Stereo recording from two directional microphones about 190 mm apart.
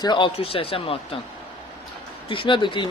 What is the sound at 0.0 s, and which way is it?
Speech, 25° left (ahead or behind).